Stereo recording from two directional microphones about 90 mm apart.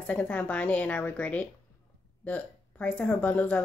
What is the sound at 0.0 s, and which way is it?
Speech, 15° left (ahead or behind).